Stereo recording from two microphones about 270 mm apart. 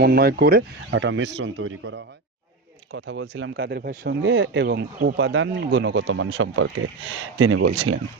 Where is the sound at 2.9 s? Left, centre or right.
Right.